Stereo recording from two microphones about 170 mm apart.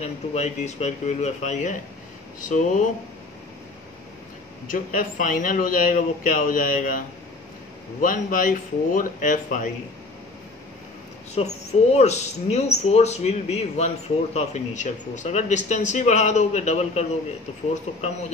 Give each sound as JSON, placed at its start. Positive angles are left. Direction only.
{"t": 0.0, "sound": "a man's voice", "side_deg": 40}
{"t": 4.6, "sound": "a man's voice", "side_deg": 50}
{"t": 11.3, "sound": "speech", "side_deg": 40}